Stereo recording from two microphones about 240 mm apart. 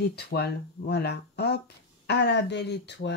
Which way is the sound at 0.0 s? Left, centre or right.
Left.